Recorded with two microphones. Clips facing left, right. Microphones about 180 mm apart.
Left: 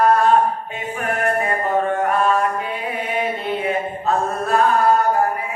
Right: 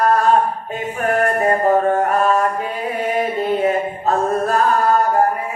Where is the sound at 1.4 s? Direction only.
40° right (ahead or behind).